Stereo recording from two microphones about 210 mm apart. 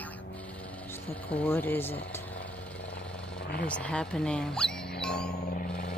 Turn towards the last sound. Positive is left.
turn(degrees=50)  # may be behind; listen again after turning